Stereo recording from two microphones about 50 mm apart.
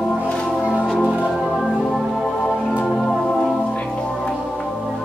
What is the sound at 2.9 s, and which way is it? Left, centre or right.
Music, centre.